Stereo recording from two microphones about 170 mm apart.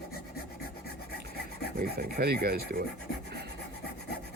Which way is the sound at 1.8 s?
65° right (ahead or behind).